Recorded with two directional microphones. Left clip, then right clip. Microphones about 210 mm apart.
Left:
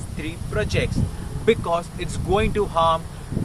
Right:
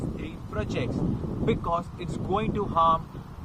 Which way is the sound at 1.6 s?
Centre (ahead or behind).